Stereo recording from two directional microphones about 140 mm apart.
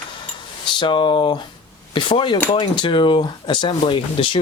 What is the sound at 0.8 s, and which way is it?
Speech, 35° left (ahead or behind).